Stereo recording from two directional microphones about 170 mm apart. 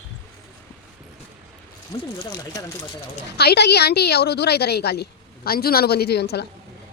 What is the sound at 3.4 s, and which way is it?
A woman's voice, 75° left (ahead or behind).